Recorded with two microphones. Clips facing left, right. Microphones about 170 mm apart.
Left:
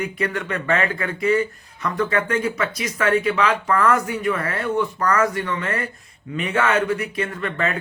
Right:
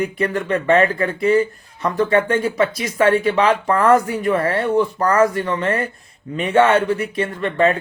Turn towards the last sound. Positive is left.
turn(degrees=-30)  # may be behind; listen again after turning